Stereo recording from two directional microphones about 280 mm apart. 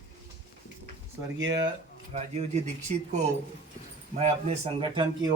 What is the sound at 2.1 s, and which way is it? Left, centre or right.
Speech, right.